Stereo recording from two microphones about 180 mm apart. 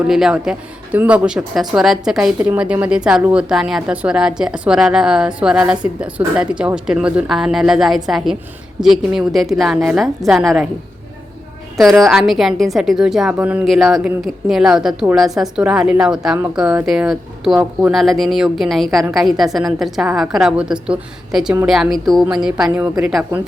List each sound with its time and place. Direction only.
0.0 s speech: 5° right (ahead or behind)
11.8 s speech: centre (ahead or behind)